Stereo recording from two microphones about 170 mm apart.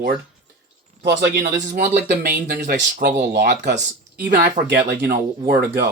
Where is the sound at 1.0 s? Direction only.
90° right.